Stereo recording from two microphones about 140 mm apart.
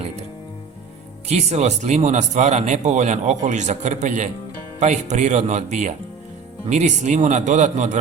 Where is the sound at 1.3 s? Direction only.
50° right (ahead or behind).